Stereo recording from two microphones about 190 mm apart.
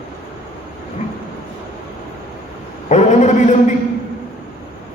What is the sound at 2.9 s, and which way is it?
Speech, 40° left (ahead or behind).